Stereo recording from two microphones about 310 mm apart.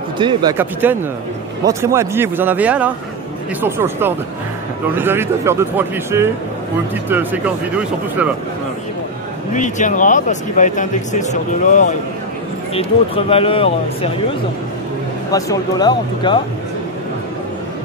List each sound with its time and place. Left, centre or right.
0.2 s speech: centre
9.5 s speech: left
12.7 s speech: centre
15.3 s speech: centre